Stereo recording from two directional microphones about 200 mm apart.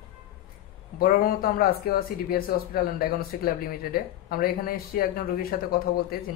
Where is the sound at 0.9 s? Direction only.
50° left (ahead or behind).